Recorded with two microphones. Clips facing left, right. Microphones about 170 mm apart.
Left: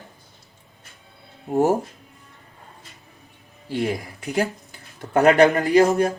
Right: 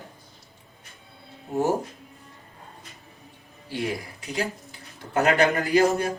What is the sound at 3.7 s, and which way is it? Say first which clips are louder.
A man's voice: left 5 dB; 55° left (ahead or behind).